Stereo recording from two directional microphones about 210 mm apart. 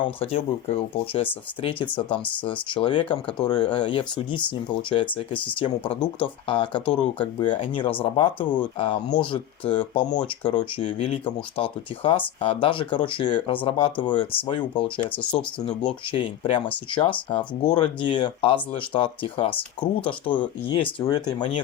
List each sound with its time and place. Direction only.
0.0 s speech: 25° left (ahead or behind)
15.1 s speech: 5° left (ahead or behind)
15.4 s speech: 25° left (ahead or behind)